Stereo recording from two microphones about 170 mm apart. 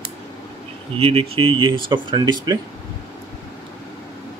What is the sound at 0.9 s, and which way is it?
Speech, 35° right (ahead or behind).